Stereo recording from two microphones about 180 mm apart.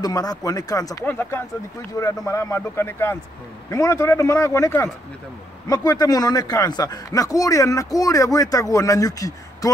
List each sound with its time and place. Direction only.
0.0 s speech: 20° left (ahead or behind)